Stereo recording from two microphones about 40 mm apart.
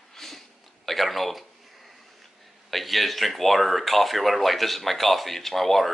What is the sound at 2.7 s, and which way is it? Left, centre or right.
Speech, centre.